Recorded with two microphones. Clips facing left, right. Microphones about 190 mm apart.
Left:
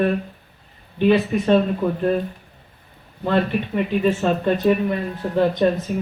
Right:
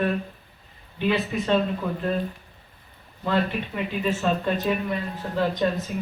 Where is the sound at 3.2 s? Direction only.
50° left (ahead or behind).